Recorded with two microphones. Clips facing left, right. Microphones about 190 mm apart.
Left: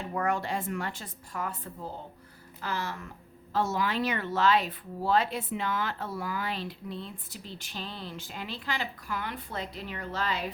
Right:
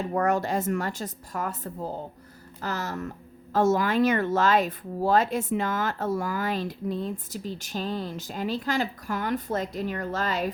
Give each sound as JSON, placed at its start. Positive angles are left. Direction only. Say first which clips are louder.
{"t": 0.1, "sound": "speech", "louder": "right 4 dB", "side_deg": -45}